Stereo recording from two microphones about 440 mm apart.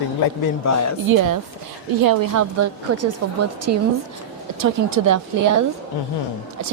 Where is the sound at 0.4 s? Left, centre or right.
Left.